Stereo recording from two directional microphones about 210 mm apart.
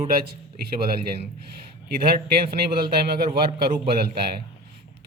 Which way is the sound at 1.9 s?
45° right (ahead or behind).